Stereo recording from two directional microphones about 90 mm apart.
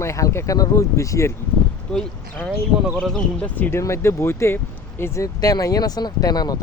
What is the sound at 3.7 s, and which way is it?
Speech, 30° left (ahead or behind).